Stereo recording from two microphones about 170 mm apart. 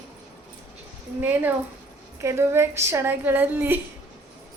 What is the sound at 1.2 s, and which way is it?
A woman's voice, 10° right (ahead or behind).